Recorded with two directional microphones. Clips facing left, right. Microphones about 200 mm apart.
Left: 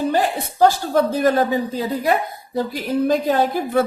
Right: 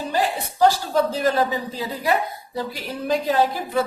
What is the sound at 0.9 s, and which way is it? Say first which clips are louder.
A woman's voice: left 3 dB; 55° left (ahead or behind).